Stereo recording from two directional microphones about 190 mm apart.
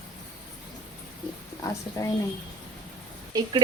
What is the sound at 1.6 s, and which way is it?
Speech, 15° left (ahead or behind).